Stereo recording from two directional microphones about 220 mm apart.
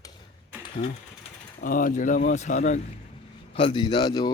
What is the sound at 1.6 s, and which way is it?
A man's voice, 40° left (ahead or behind).